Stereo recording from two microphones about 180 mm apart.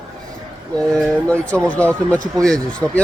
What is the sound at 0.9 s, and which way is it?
Speech, 5° left (ahead or behind).